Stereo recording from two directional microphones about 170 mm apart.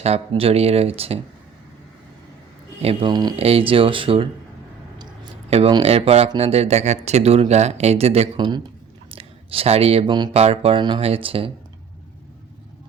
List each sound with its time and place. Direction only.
0.0 s speech: 35° right (ahead or behind)
2.8 s speech: 25° right (ahead or behind)
3.3 s speech: 35° right (ahead or behind)
5.5 s speech: 35° right (ahead or behind)
10.3 s speech: 35° right (ahead or behind)